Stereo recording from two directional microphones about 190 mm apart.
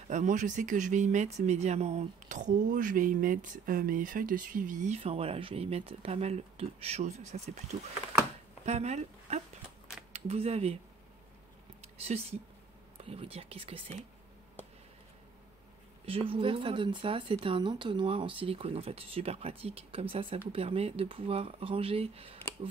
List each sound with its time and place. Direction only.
0.1 s speech: 40° right (ahead or behind)
8.6 s speech: 35° right (ahead or behind)
11.8 s speech: 35° right (ahead or behind)
16.1 s speech: 30° right (ahead or behind)